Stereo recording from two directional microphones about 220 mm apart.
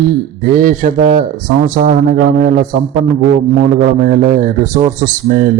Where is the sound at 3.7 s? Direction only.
40° right (ahead or behind).